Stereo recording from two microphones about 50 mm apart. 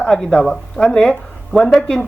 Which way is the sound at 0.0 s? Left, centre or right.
Centre.